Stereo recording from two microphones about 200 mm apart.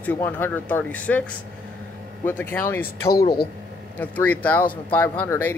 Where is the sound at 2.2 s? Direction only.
10° left (ahead or behind).